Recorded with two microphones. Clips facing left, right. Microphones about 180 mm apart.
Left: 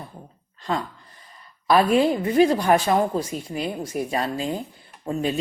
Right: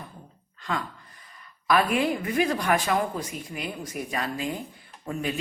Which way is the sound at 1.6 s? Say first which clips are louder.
Left 5 dB; 30° left (ahead or behind).